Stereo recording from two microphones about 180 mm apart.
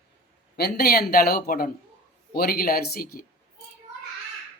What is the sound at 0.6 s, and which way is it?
Speech, 60° left (ahead or behind).